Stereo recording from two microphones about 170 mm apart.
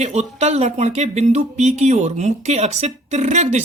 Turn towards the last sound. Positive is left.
turn(degrees=-45)  # may be behind; listen again after turning